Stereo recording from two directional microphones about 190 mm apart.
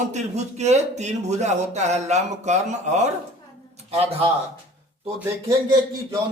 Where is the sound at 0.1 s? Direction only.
35° right (ahead or behind).